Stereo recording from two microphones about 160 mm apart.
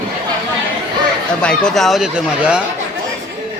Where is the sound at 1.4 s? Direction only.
5° left (ahead or behind).